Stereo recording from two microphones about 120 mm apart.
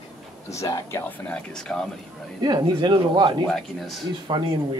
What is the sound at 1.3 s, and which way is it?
Speech, 10° left (ahead or behind).